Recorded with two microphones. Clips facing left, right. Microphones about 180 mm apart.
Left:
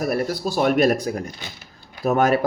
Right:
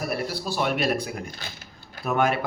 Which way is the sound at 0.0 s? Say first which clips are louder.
Left 6 dB; 50° left (ahead or behind).